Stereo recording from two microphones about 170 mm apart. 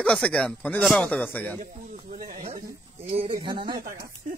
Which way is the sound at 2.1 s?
55° right (ahead or behind).